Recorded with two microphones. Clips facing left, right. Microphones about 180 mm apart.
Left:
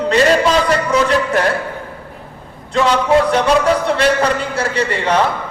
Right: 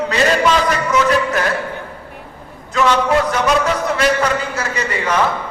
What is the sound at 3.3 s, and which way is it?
A man's voice, 30° left (ahead or behind).